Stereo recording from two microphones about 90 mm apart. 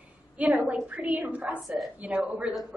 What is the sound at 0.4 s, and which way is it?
A woman's voice, 15° right (ahead or behind).